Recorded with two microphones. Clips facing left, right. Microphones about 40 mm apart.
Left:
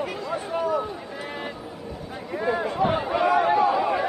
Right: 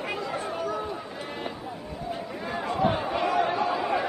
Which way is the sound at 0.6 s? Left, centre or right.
Centre.